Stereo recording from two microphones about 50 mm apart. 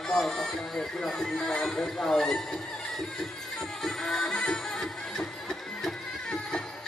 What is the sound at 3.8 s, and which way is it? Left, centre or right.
Music, centre.